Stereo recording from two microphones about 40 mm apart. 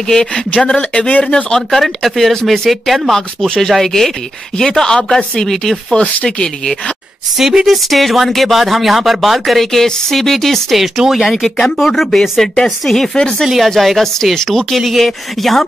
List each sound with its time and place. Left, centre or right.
0.7 s speech: left
1.7 s speech: centre
3.4 s speech: centre
7.3 s speech: centre
11.4 s speech: centre